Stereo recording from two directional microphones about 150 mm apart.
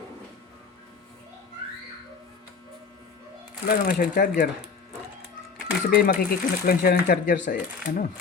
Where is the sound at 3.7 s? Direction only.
75° left (ahead or behind).